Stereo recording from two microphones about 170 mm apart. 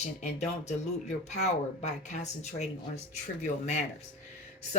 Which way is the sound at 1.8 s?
45° left (ahead or behind).